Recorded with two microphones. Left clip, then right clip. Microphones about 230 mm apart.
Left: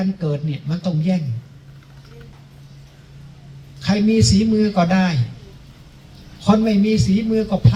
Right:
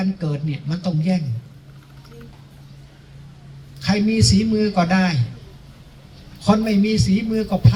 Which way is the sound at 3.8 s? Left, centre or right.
Right.